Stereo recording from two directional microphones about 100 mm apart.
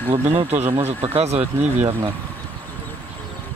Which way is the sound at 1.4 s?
15° right (ahead or behind).